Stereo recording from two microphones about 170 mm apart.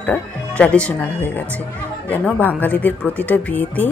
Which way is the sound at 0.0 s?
10° left (ahead or behind).